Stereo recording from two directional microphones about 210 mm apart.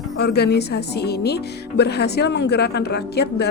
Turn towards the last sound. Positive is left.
turn(degrees=50)  # may be behind; listen again after turning